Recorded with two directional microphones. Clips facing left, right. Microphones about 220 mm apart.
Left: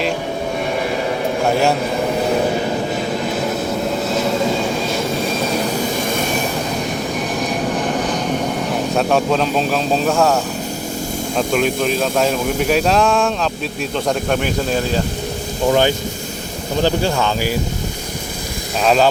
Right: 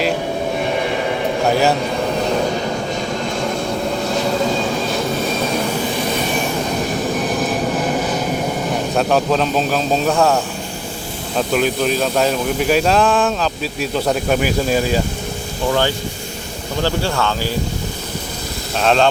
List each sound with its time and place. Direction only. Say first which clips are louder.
1.5 s speech: right 1 dB; centre (ahead or behind)
4.1 s vehicle: even; centre (ahead or behind)
8.7 s speech: even; centre (ahead or behind)
16.8 s speech: left 2 dB; 15° left (ahead or behind)
18.8 s speech: left 1 dB; 5° left (ahead or behind)